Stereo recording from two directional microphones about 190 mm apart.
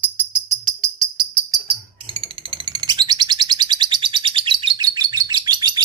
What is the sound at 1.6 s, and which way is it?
Bird, 30° right (ahead or behind).